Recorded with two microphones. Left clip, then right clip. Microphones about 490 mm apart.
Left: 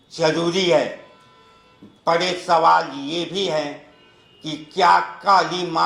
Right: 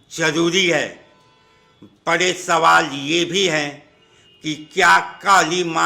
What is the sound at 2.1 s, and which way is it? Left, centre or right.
Speech, right.